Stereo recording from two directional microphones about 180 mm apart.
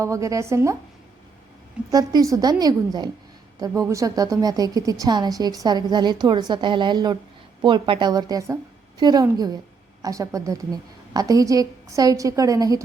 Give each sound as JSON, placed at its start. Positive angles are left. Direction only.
{"t": 0.0, "sound": "a woman's voice", "side_deg": -15}
{"t": 1.9, "sound": "speech", "side_deg": -20}